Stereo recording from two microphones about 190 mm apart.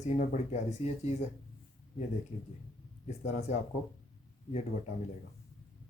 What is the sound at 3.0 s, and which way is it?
Speech, 35° left (ahead or behind).